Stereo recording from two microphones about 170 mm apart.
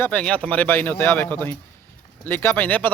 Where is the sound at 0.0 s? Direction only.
5° left (ahead or behind).